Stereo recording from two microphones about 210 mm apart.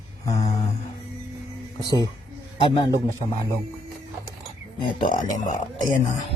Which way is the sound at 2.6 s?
20° left (ahead or behind).